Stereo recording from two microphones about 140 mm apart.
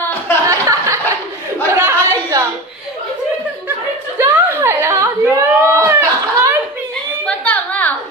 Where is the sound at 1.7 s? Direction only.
20° right (ahead or behind).